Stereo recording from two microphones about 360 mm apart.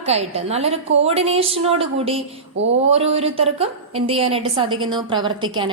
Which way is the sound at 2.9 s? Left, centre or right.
Centre.